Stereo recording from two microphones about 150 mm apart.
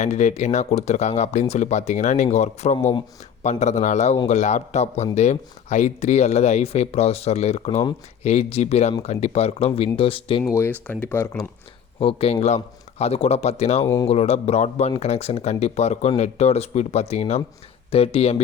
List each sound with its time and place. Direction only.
0.0 s speech: 50° left (ahead or behind)
10.5 s speech: 15° left (ahead or behind)
11.9 s speech: 40° left (ahead or behind)
13.8 s speech: 20° left (ahead or behind)
14.1 s speech: 45° left (ahead or behind)